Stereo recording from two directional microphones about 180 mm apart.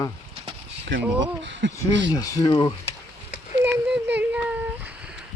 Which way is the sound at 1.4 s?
85° right.